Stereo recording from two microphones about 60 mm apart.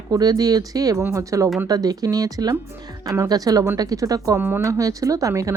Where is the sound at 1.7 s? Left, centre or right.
Right.